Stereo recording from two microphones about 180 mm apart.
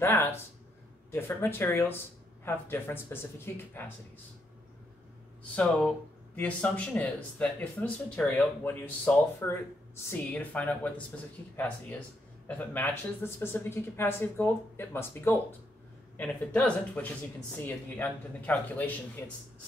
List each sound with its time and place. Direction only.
0.0 s speech: 15° left (ahead or behind)
5.6 s speech: 5° left (ahead or behind)
12.4 s speech: 10° left (ahead or behind)